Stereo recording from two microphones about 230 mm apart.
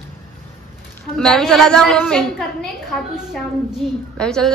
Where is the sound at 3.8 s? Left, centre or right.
Centre.